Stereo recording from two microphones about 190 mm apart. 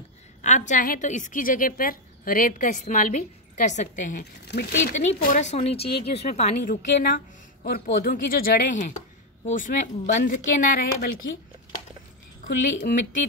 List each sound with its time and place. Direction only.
0.4 s a woman's voice: 40° left (ahead or behind)
4.2 s speech: 60° left (ahead or behind)
5.0 s a woman's voice: 40° left (ahead or behind)
6.6 s a woman's voice: 50° left (ahead or behind)
12.4 s a woman's voice: 55° left (ahead or behind)